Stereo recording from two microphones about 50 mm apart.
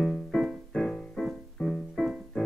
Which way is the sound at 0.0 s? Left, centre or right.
Centre.